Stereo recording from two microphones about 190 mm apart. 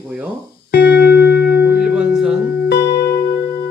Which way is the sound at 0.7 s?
60° left (ahead or behind).